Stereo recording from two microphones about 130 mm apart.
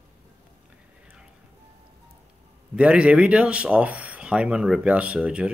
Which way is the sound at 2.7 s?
10° right (ahead or behind).